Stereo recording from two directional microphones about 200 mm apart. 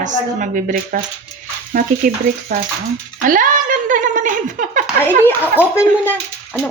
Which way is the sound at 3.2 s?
40° right (ahead or behind).